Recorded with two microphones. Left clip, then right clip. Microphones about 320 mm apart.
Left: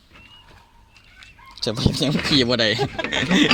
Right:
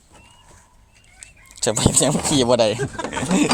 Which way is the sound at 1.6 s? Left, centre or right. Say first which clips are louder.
Right 4 dB; right.